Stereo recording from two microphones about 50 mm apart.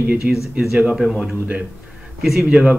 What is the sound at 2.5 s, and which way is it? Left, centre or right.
Speech, right.